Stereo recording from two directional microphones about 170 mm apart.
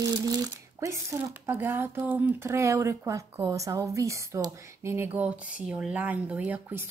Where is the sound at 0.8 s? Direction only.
15° right (ahead or behind).